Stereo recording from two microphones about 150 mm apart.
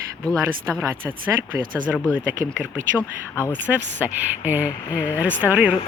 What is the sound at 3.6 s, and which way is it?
Speech, 10° right (ahead or behind).